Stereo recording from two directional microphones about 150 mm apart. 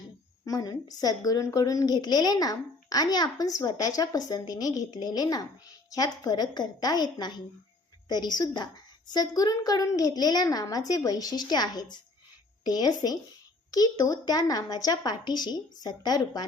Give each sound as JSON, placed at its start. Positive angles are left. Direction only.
{"t": 0.4, "sound": "a woman's voice", "side_deg": 25}